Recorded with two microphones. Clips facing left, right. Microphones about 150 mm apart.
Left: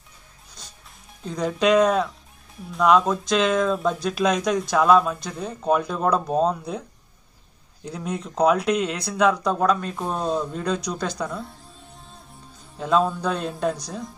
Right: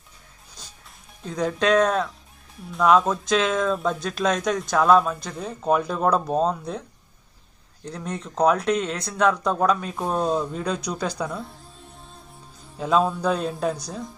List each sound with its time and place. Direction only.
1.2 s speech: centre (ahead or behind)
7.8 s speech: 10° left (ahead or behind)
12.7 s speech: centre (ahead or behind)